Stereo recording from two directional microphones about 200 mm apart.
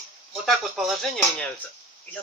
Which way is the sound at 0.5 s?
Centre (ahead or behind).